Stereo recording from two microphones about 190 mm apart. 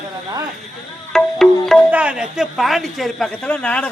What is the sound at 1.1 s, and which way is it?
Speech, centre (ahead or behind).